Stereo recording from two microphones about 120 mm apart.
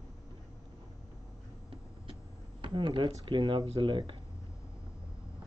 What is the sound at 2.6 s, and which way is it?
Speech, 45° right (ahead or behind).